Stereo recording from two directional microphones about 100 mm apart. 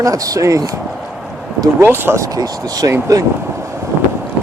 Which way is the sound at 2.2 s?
35° right (ahead or behind).